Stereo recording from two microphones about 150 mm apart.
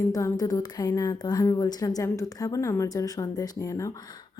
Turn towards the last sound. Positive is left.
turn(degrees=20)  # may be behind; listen again after turning